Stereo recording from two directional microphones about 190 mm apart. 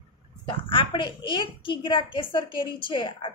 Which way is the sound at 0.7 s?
25° left (ahead or behind).